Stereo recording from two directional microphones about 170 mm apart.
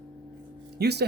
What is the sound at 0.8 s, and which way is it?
Speech, 75° right (ahead or behind).